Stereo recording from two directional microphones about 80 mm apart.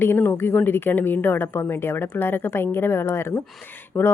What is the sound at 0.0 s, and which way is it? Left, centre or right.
A woman's voice, left.